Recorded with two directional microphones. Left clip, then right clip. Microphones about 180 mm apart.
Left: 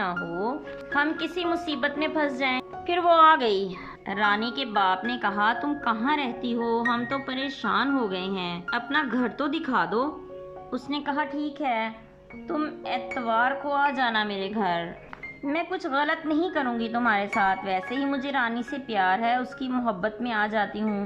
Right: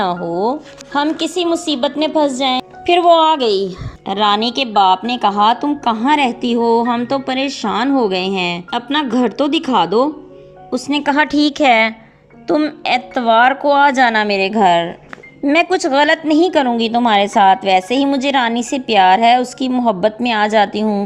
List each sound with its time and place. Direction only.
0.0 s a woman's voice: 30° right (ahead or behind); by 11.9 s 55° right (ahead or behind)
12.5 s a woman's voice: 40° right (ahead or behind)